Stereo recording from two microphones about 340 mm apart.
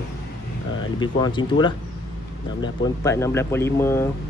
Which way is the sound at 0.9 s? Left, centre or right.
Centre.